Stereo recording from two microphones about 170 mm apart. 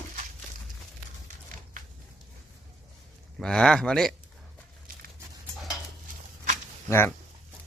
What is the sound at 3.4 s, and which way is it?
Speech, 5° left (ahead or behind).